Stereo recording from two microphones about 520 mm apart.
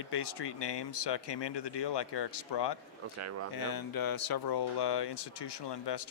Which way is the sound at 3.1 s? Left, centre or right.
Right.